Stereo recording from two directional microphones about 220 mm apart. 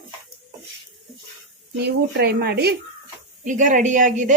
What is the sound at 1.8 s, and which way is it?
Speech, 45° right (ahead or behind).